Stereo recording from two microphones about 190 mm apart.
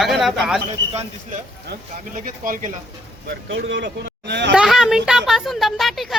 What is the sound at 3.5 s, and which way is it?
Speech, 70° right (ahead or behind).